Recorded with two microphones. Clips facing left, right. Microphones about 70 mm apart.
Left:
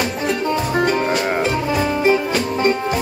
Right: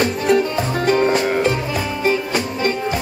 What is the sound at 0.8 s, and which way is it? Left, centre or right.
Music, centre.